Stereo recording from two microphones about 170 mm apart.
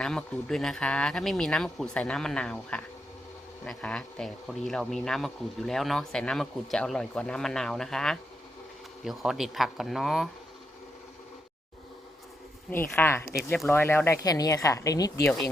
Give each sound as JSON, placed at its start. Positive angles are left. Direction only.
{"t": 0.0, "sound": "speech", "side_deg": 5}
{"t": 12.7, "sound": "a woman's voice", "side_deg": 10}